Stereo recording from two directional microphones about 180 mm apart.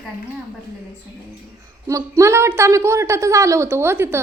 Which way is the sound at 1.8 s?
15° right (ahead or behind).